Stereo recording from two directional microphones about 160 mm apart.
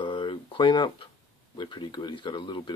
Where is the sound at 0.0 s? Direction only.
30° left (ahead or behind).